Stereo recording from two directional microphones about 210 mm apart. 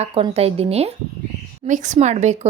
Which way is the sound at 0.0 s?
30° right (ahead or behind).